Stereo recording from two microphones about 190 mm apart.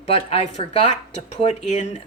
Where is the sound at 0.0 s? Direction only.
35° left (ahead or behind).